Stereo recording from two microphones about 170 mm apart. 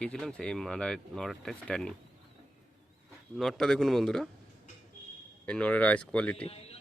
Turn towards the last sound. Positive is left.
turn(degrees=35)  # may be behind; listen again after turning